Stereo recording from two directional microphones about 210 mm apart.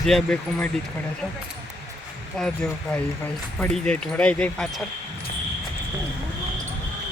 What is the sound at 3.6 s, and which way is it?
Speech, 5° left (ahead or behind).